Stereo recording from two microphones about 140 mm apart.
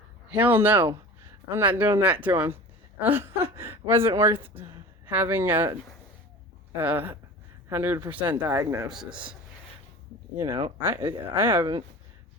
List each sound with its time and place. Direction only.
0.3 s a woman's voice: 10° right (ahead or behind)
6.7 s a woman's voice: 15° right (ahead or behind)
8.5 s speech: 25° right (ahead or behind)
10.3 s a woman's voice: 20° right (ahead or behind)